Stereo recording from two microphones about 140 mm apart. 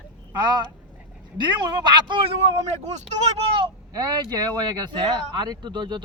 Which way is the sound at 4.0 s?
30° right (ahead or behind).